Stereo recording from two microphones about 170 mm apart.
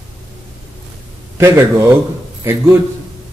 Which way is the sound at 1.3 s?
15° right (ahead or behind).